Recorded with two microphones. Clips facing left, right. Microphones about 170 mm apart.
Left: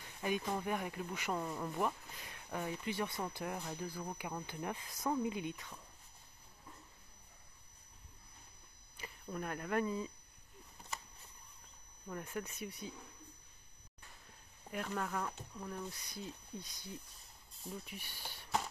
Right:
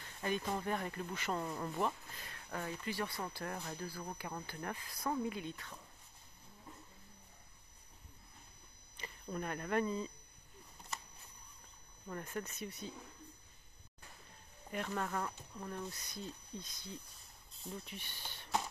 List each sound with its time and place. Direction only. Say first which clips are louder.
0.5 s speech: even; 10° left (ahead or behind)
8.9 s speech: right 1 dB; 5° left (ahead or behind)
12.1 s speech: even; 5° left (ahead or behind)
14.7 s speech: right 1 dB; centre (ahead or behind)
16.1 s speech: even; 10° left (ahead or behind)